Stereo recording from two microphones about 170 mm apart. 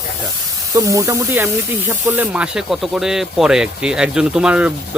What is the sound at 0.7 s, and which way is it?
Speech, 20° right (ahead or behind).